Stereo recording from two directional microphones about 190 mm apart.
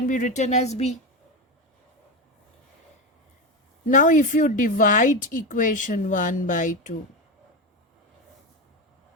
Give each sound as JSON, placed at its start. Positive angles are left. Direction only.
{"t": 0.1, "sound": "speech", "side_deg": 40}
{"t": 3.8, "sound": "a woman's voice", "side_deg": 40}